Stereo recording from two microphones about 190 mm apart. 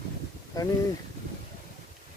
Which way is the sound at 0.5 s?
20° left (ahead or behind).